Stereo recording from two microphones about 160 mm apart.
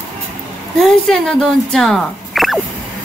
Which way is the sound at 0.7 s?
Centre (ahead or behind).